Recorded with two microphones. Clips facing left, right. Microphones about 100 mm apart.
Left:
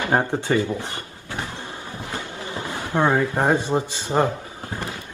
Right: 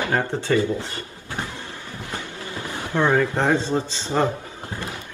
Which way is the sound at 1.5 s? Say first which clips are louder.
Left 2 dB; 20° left (ahead or behind).